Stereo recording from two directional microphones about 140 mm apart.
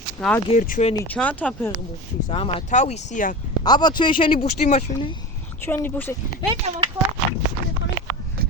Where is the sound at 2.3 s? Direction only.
40° left (ahead or behind).